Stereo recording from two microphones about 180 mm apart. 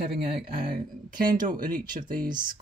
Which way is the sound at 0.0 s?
60° right (ahead or behind).